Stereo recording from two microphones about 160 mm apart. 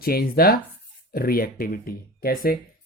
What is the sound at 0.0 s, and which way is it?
Speech, 70° left (ahead or behind).